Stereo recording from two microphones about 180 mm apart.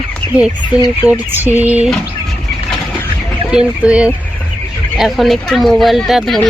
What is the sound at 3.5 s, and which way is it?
Speech, 5° right (ahead or behind).